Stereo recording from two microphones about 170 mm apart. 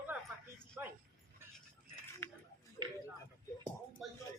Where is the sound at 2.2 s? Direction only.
15° left (ahead or behind).